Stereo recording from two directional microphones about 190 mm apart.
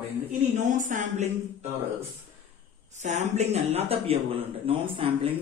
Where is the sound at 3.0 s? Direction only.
35° right (ahead or behind).